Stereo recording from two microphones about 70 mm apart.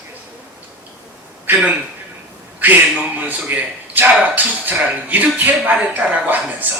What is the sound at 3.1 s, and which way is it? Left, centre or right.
Speech, right.